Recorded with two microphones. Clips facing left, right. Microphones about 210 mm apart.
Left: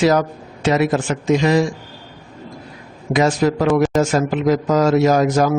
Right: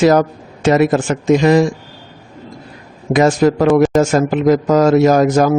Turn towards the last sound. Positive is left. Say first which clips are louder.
# right 4 dB
turn(degrees=-50)  # may be behind; listen again after turning